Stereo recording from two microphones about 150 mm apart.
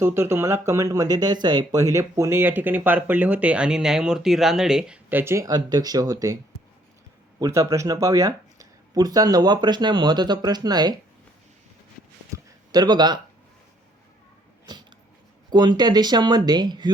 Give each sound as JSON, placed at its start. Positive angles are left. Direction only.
{"t": 0.0, "sound": "speech", "side_deg": -15}
{"t": 7.3, "sound": "speech", "side_deg": -20}
{"t": 12.3, "sound": "a sound", "side_deg": -20}
{"t": 12.7, "sound": "speech", "side_deg": -30}
{"t": 14.7, "sound": "cat", "side_deg": -30}
{"t": 15.4, "sound": "speech", "side_deg": -30}